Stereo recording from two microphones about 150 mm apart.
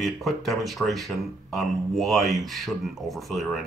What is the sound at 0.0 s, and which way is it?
Speech, centre (ahead or behind).